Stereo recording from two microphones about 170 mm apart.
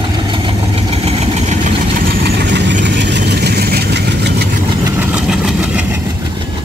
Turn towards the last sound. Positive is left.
turn(degrees=-5)  # may be behind; listen again after turning